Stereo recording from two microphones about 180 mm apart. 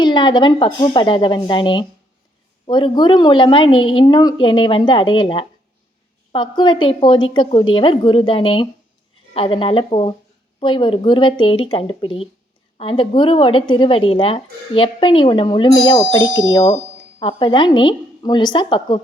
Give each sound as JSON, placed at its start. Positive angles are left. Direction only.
{"t": 0.0, "sound": "a woman's voice", "side_deg": 25}
{"t": 16.6, "sound": "a woman's voice", "side_deg": 35}